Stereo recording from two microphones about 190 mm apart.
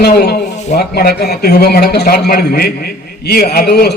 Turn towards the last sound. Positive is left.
turn(degrees=55)  # may be behind; listen again after turning